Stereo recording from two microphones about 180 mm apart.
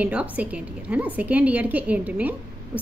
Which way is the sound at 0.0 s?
10° right (ahead or behind).